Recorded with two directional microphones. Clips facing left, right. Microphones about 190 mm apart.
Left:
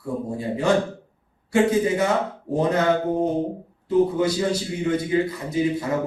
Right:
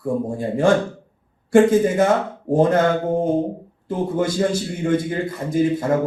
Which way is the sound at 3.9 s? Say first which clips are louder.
Left 2 dB; 50° right (ahead or behind).